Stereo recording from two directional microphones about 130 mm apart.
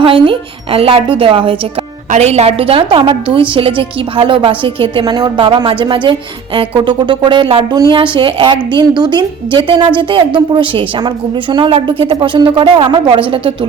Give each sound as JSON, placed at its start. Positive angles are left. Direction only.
{"t": 0.0, "sound": "speech", "side_deg": -45}
{"t": 2.0, "sound": "a woman's voice", "side_deg": -60}